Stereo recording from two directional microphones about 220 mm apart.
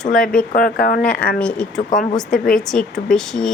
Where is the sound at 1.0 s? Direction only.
5° left (ahead or behind).